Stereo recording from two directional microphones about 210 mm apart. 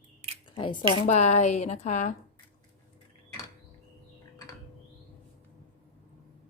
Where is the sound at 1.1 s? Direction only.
35° left (ahead or behind).